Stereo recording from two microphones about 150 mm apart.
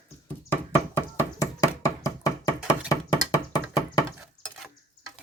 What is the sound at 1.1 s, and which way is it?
Knock, 20° left (ahead or behind).